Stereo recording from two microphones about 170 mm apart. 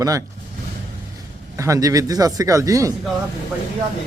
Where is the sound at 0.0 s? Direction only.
20° right (ahead or behind).